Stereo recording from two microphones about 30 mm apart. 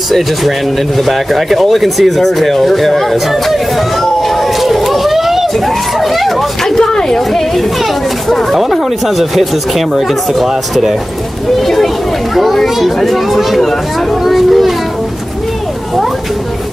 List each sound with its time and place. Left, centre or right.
0.1 s speech: centre
5.5 s speech: centre
6.7 s speech: left
7.2 s speech: centre
11.6 s a sound: centre
12.6 s a child's voice: centre